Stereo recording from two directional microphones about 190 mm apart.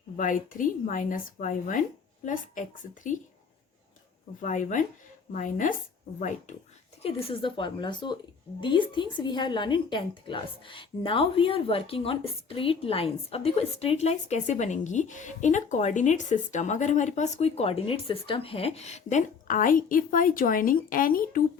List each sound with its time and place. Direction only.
0.2 s speech: 45° left (ahead or behind)
4.4 s a woman's voice: 40° left (ahead or behind)
7.0 s a woman's voice: 30° left (ahead or behind); by 21.4 s 50° left (ahead or behind)